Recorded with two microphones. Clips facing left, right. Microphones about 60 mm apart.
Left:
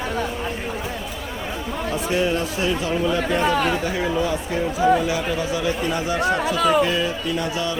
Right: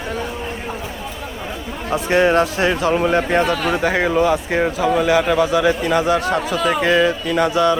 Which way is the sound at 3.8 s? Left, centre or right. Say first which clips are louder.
Right 6 dB; right.